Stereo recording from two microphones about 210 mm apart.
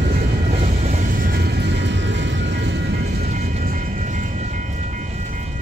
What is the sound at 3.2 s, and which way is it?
Train, 35° right (ahead or behind).